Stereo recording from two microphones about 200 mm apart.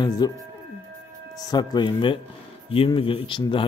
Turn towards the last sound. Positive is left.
turn(degrees=25)  # may be behind; listen again after turning